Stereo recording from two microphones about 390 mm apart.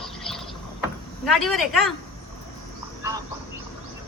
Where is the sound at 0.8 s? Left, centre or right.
Centre.